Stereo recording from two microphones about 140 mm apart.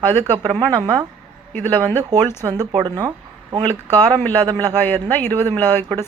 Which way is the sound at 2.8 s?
30° right (ahead or behind).